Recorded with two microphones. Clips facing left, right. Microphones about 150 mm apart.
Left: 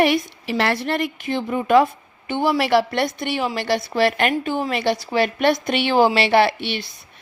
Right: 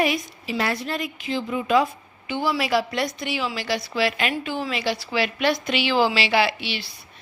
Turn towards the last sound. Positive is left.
turn(degrees=55)  # may be behind; listen again after turning